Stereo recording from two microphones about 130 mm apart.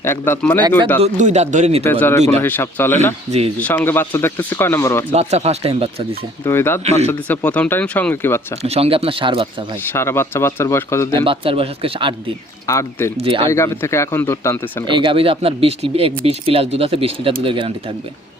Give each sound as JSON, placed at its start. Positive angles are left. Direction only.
{"t": 0.0, "sound": "speech", "side_deg": 15}
{"t": 1.0, "sound": "speech", "side_deg": -65}
{"t": 1.8, "sound": "speech", "side_deg": 15}
{"t": 5.1, "sound": "speech", "side_deg": -55}
{"t": 6.4, "sound": "speech", "side_deg": 20}
{"t": 8.6, "sound": "speech", "side_deg": -50}
{"t": 9.8, "sound": "speech", "side_deg": 20}
{"t": 11.1, "sound": "speech", "side_deg": -40}
{"t": 12.6, "sound": "speech", "side_deg": 20}
{"t": 13.1, "sound": "speech", "side_deg": -40}
{"t": 13.5, "sound": "speech", "side_deg": 20}
{"t": 14.8, "sound": "speech", "side_deg": -40}